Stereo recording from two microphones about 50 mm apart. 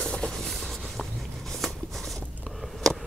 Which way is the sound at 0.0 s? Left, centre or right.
Centre.